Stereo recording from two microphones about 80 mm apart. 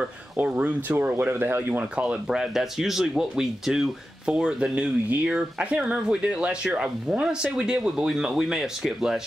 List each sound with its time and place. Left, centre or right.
0.4 s speech: centre
2.2 s speech: centre